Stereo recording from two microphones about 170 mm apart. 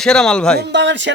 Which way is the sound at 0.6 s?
90° right.